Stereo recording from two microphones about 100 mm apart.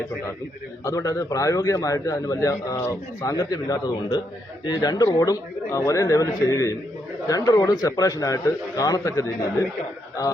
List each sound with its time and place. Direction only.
0.9 s a man's voice: 35° left (ahead or behind)